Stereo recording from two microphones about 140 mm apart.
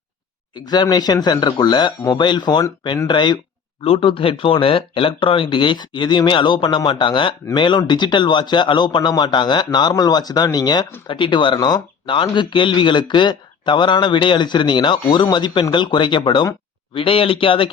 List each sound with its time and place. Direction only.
0.5 s speech: 30° left (ahead or behind)